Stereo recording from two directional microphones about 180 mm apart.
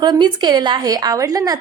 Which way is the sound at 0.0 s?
25° right (ahead or behind).